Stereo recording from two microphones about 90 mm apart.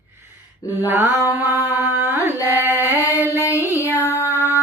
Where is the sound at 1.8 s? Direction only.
20° right (ahead or behind).